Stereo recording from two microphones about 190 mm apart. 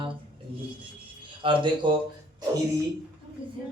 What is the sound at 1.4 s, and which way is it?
Speech, 25° right (ahead or behind).